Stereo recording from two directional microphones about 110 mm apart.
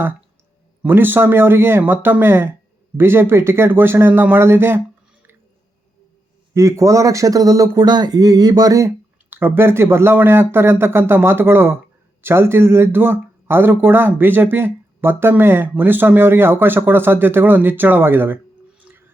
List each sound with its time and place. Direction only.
0.8 s speech: 20° right (ahead or behind)
6.5 s speech: 30° right (ahead or behind)
9.3 s speech: 20° right (ahead or behind)
18.9 s a sound: 20° right (ahead or behind)